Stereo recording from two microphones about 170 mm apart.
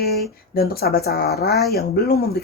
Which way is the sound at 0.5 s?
65° left (ahead or behind).